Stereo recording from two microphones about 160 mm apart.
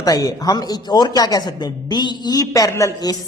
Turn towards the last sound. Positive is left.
turn(degrees=25)  # may be behind; listen again after turning